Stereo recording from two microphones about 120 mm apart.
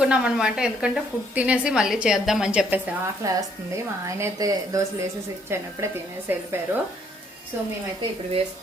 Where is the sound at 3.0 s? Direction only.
30° right (ahead or behind).